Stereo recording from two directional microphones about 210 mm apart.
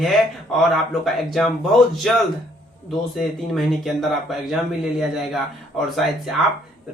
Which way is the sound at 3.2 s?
Centre (ahead or behind).